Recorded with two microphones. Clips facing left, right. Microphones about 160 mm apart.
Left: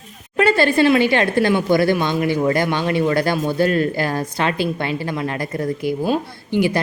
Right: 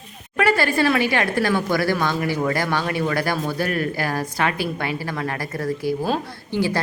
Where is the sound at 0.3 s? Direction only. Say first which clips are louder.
Left 4 dB; 25° left (ahead or behind).